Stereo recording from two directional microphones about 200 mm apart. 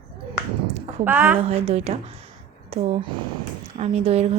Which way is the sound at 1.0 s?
10° right (ahead or behind).